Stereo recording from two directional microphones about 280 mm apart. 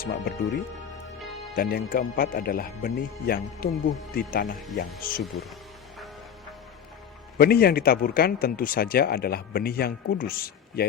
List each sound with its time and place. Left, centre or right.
0.0 s speech: left
1.5 s speech: left
4.5 s speech: centre
5.0 s speech: left
7.3 s speech: left